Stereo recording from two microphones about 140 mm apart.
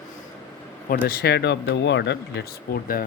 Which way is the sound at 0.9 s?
90° left.